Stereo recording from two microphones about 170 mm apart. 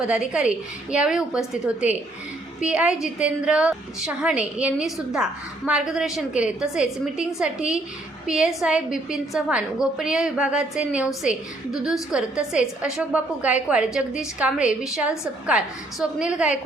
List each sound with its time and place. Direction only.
0.1 s a woman's voice: 5° right (ahead or behind)